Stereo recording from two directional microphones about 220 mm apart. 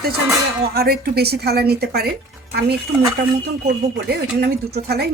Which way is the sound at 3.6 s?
45° right (ahead or behind).